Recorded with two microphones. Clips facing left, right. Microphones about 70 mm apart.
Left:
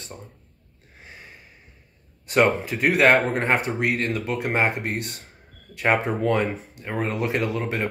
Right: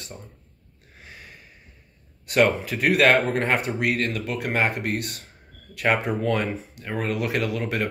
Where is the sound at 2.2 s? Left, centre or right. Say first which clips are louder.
Even; left.